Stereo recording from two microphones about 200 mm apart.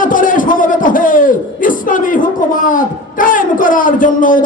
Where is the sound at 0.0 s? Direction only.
40° left (ahead or behind).